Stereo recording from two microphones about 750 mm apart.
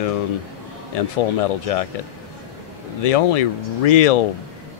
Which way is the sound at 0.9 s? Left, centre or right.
Left.